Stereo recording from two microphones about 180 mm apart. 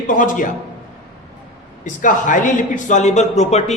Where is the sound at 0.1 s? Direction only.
45° left (ahead or behind).